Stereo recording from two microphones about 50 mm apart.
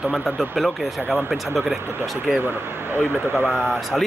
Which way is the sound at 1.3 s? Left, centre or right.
Centre.